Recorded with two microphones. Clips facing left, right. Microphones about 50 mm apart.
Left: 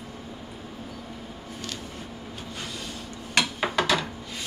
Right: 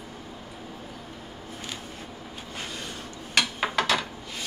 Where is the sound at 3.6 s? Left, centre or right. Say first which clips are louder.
Left 1 dB; centre.